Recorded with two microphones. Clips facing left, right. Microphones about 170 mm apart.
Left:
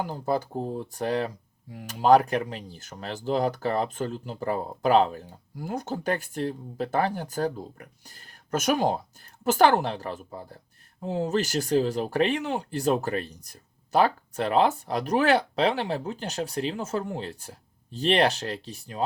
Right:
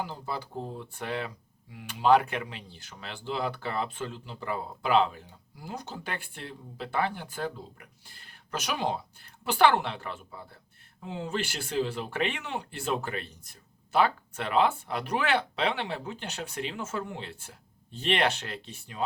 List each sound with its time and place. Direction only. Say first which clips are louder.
0.0 s speech: left 8 dB; 45° left (ahead or behind)